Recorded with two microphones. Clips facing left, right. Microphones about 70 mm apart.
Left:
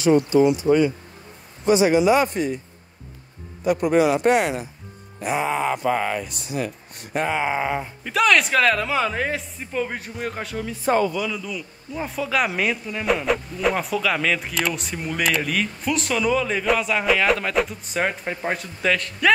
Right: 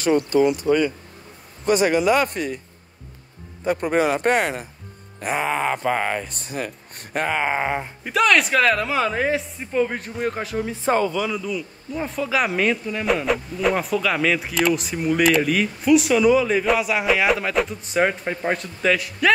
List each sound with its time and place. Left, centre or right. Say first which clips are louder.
0.3 s speech: left 1 dB; right
3.6 s speech: left 2 dB; right
8.1 s speech: right 1 dB; centre
10.6 s speech: even; right
11.3 s speech: right 4 dB; centre